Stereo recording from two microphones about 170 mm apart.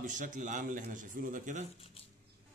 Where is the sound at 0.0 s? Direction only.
50° right (ahead or behind).